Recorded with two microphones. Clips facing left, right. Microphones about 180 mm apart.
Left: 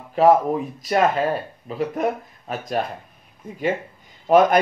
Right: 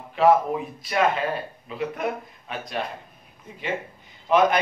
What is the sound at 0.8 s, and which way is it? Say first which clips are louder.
A man's voice: left 4 dB; 40° left (ahead or behind).